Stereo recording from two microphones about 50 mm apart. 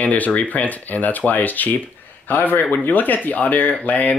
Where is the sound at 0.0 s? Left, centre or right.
Left.